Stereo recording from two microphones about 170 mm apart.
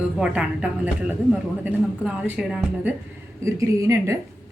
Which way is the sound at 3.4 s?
20° right (ahead or behind).